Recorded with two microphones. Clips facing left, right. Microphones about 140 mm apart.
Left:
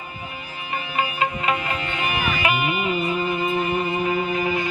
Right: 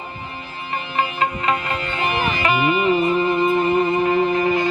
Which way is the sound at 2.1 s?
30° right (ahead or behind).